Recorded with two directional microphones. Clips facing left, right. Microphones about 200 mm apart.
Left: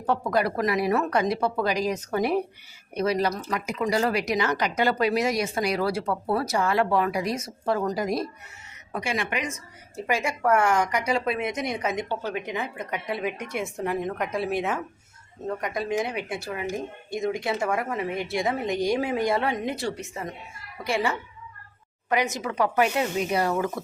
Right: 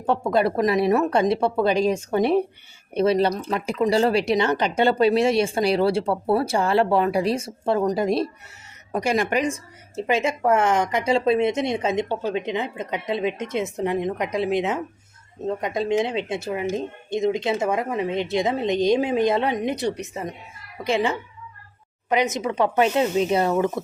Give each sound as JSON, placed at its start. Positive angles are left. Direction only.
{"t": 0.0, "sound": "speech", "side_deg": -25}
{"t": 8.9, "sound": "a woman's voice", "side_deg": -40}
{"t": 10.0, "sound": "speech", "side_deg": -20}